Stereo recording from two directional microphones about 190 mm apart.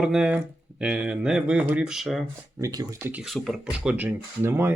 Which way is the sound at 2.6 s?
15° right (ahead or behind).